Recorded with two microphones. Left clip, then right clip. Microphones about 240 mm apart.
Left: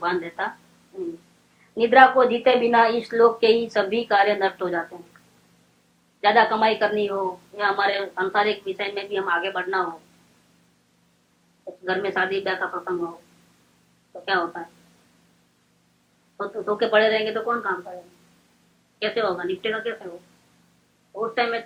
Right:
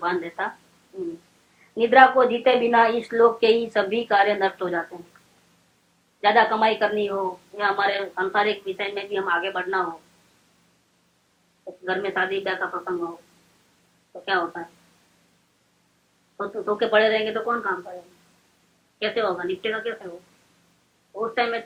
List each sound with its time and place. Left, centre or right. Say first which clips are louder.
0.0 s a woman's voice: even; right
1.7 s a woman's voice: even; right
6.2 s a woman's voice: even; right
11.9 s a woman's voice: left 1 dB; right
14.3 s a woman's voice: even; right
16.4 s a woman's voice: even; right
18.9 s a woman's voice: even; right
21.2 s a woman's voice: even; right